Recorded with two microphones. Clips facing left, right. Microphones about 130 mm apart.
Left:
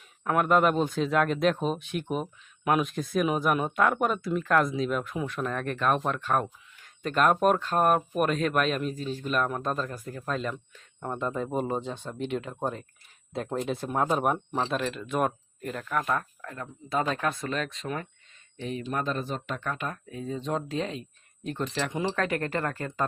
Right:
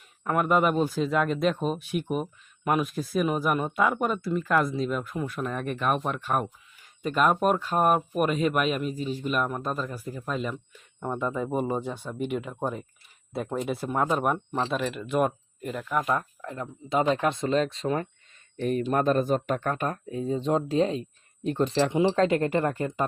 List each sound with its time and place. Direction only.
0.3 s speech: centre (ahead or behind)
14.7 s speech: 5° right (ahead or behind)
16.1 s speech: 20° right (ahead or behind)
18.5 s speech: 50° right (ahead or behind); by 23.0 s 20° right (ahead or behind)